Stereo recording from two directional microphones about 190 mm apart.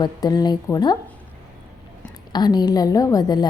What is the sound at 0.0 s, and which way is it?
Speech, 20° left (ahead or behind).